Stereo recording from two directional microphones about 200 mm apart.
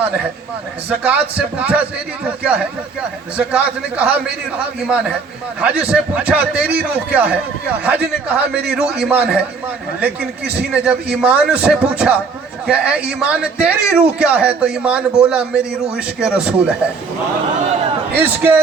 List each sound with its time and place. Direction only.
0.9 s a man's voice: 5° right (ahead or behind)
10.7 s a man's voice: 5° right (ahead or behind)
18.2 s a man's voice: 10° right (ahead or behind)